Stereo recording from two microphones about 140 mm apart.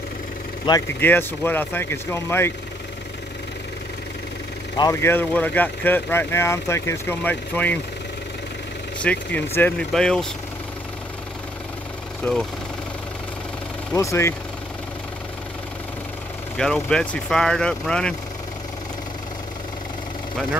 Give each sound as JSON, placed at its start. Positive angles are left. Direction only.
{"t": 0.7, "sound": "speech", "side_deg": 35}
{"t": 1.0, "sound": "speech", "side_deg": 15}
{"t": 5.0, "sound": "speech", "side_deg": 15}
{"t": 9.0, "sound": "speech", "side_deg": 10}
{"t": 12.2, "sound": "speech", "side_deg": 15}
{"t": 13.9, "sound": "speech", "side_deg": 20}
{"t": 16.5, "sound": "speech", "side_deg": 5}